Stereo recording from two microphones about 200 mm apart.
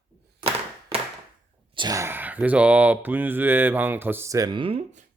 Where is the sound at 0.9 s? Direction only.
30° right (ahead or behind).